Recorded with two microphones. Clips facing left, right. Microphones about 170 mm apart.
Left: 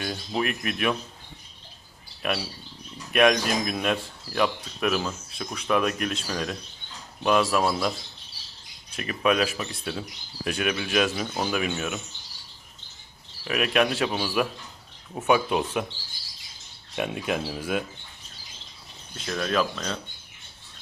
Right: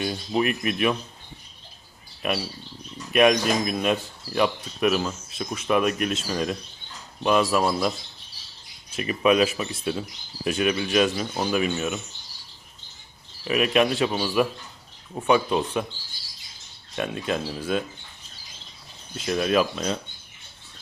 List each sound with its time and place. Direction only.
0.0 s speech: 10° right (ahead or behind)
2.2 s speech: centre (ahead or behind)
9.0 s speech: 5° right (ahead or behind)
13.4 s speech: centre (ahead or behind)
16.9 s speech: 10° left (ahead or behind)
19.1 s speech: 10° right (ahead or behind)